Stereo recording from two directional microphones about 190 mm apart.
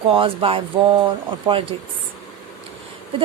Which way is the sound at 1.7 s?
25° right (ahead or behind).